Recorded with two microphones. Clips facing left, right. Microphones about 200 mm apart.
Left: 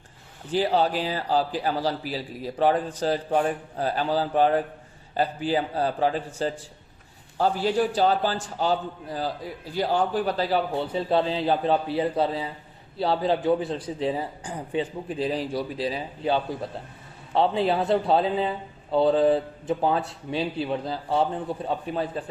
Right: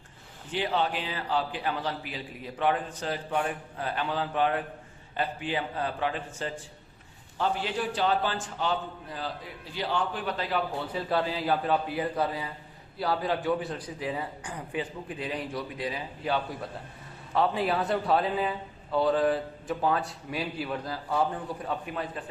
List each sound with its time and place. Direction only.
0.5 s a man's voice: 35° left (ahead or behind)